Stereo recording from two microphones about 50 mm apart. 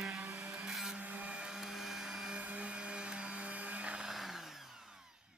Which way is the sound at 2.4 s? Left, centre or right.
Right.